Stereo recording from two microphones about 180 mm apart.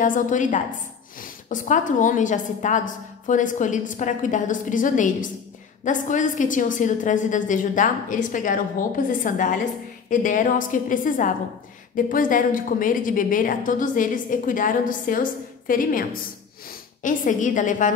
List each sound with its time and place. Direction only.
0.0 s a woman's voice: 45° left (ahead or behind)